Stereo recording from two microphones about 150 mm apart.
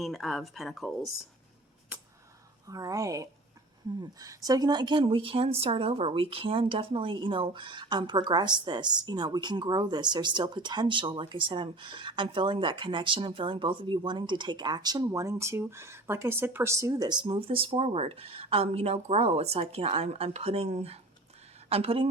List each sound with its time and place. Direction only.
0.0 s speech: centre (ahead or behind)
2.6 s a woman's voice: 25° right (ahead or behind)